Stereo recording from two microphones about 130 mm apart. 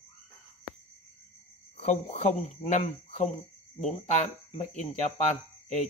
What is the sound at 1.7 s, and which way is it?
Speech, 65° left (ahead or behind).